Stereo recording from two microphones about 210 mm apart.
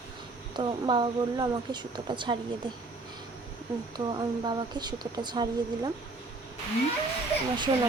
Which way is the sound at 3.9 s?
20° right (ahead or behind).